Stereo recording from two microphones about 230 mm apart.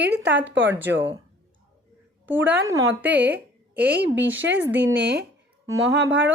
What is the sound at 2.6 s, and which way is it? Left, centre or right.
Speech, centre.